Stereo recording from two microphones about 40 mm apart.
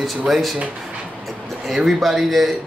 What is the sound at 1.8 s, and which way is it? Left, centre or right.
Speech, centre.